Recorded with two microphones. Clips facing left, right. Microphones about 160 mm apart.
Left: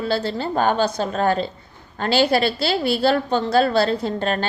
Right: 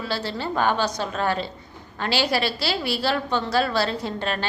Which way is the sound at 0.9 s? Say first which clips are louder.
Left 5 dB; 35° left (ahead or behind).